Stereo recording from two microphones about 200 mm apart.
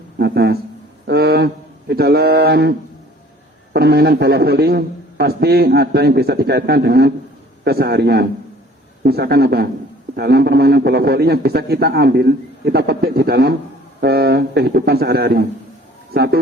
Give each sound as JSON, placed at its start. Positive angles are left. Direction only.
{"t": 0.2, "sound": "a man's voice", "side_deg": -55}
{"t": 1.0, "sound": "a sound", "side_deg": -55}
{"t": 1.9, "sound": "a man's voice", "side_deg": -55}